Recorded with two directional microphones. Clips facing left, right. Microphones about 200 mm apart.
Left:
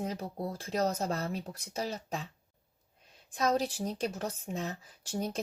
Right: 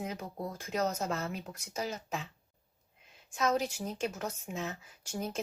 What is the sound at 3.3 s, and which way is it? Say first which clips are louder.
Speech: left 1 dB; 35° left (ahead or behind).